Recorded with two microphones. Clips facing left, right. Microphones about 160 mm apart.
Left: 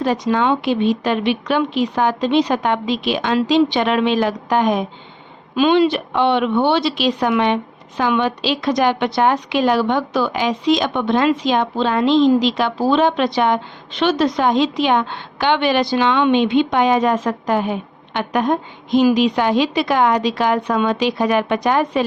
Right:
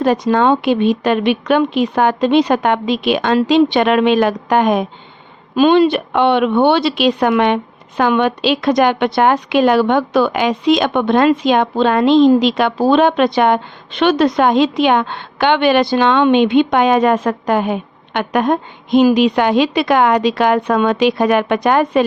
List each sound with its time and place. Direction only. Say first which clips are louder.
0.0 s speech: right 4 dB; 55° right (ahead or behind)